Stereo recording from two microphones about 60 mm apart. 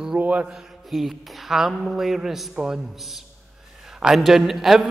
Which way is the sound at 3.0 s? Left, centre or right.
Centre.